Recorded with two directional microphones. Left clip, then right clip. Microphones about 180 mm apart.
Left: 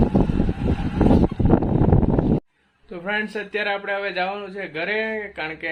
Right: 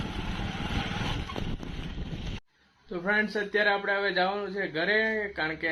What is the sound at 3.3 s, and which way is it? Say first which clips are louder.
Speech: left 1 dB; 5° left (ahead or behind).